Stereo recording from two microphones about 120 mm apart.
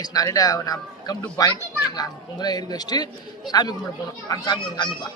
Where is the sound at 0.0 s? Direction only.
30° left (ahead or behind).